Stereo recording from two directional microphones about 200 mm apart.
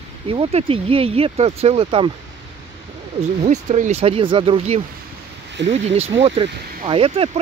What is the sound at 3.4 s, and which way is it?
Speech, 35° right (ahead or behind).